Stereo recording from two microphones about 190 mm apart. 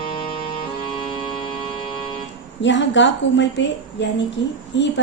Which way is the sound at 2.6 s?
70° left (ahead or behind).